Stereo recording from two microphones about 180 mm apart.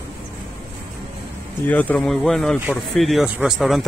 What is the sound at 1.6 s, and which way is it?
Speech, 10° left (ahead or behind).